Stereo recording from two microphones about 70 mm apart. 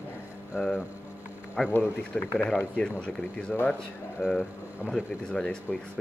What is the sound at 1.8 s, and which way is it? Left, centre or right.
Speech, left.